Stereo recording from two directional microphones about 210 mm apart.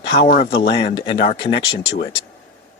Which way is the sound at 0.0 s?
30° left (ahead or behind).